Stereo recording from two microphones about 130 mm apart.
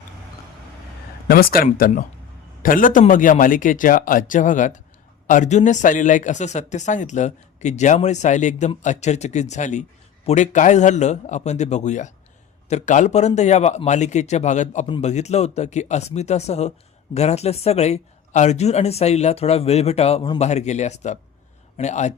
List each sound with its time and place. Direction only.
2.6 s speech: 90° left; by 22.1 s 60° left (ahead or behind)